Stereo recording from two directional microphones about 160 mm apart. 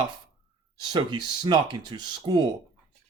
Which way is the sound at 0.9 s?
25° right (ahead or behind).